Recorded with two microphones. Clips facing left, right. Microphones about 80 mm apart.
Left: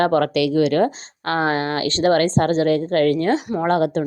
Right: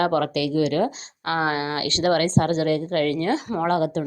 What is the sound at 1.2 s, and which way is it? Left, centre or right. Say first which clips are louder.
A woman's voice: left 3 dB; left.